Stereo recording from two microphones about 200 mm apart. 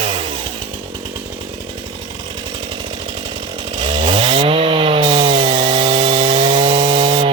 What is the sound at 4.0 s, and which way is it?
Chainsaw, 25° right (ahead or behind).